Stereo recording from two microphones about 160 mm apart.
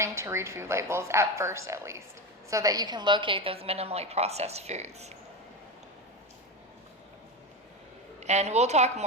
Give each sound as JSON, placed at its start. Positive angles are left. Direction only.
{"t": 0.0, "sound": "a woman's voice", "side_deg": -15}
{"t": 8.2, "sound": "a woman's voice", "side_deg": -45}